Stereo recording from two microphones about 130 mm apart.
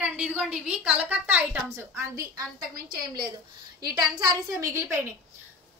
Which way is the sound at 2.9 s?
35° right (ahead or behind).